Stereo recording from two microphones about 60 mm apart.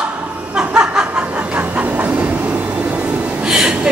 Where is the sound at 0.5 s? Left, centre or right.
Centre.